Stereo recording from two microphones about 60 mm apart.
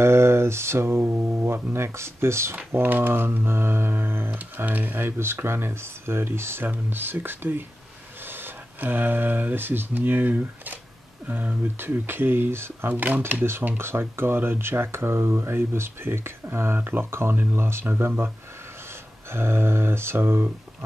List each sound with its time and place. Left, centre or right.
0.0 s speech: right
2.7 s speech: right
19.3 s speech: right